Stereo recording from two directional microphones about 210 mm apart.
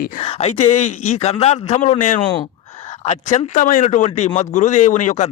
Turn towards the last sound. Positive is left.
turn(degrees=35)  # may be behind; listen again after turning